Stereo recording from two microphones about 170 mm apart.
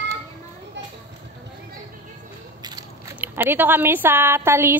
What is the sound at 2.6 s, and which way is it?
Biting, 25° right (ahead or behind).